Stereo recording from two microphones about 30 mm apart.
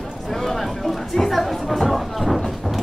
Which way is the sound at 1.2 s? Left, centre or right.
Centre.